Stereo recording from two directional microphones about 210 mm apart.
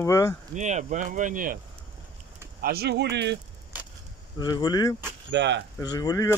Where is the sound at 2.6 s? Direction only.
50° right (ahead or behind).